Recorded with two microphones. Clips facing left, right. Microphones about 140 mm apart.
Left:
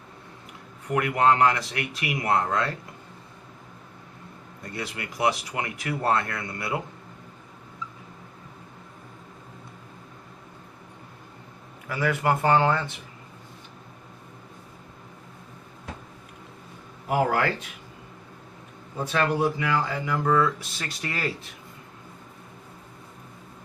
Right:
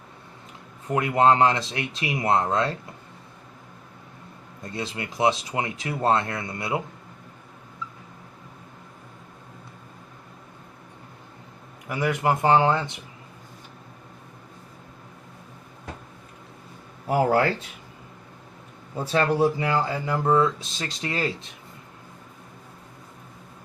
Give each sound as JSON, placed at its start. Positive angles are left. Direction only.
{"t": 0.9, "sound": "speech", "side_deg": -25}
{"t": 4.6, "sound": "speech", "side_deg": -25}
{"t": 11.9, "sound": "speech", "side_deg": -20}
{"t": 19.1, "sound": "speech", "side_deg": -30}